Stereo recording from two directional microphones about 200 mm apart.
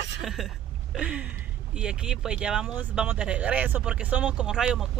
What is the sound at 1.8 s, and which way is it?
Speech, 5° right (ahead or behind).